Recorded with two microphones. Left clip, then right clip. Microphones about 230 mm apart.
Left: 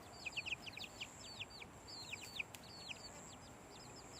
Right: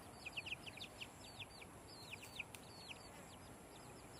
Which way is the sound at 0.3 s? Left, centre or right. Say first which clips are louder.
Left 4 dB; left.